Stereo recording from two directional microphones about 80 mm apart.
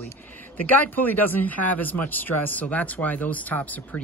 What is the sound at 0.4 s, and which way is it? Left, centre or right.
Speech, left.